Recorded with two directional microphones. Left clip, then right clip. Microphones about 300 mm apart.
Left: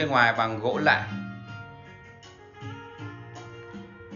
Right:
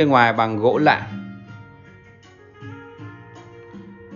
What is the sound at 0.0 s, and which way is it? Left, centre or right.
Speech, centre.